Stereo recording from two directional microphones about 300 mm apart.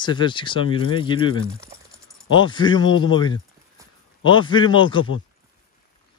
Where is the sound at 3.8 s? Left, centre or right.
Centre.